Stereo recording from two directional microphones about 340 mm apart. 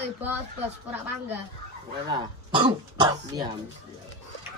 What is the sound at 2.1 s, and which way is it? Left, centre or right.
Speech, centre.